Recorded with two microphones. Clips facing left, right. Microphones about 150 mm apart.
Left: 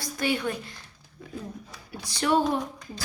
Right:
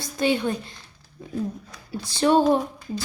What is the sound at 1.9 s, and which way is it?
Speech, 25° right (ahead or behind).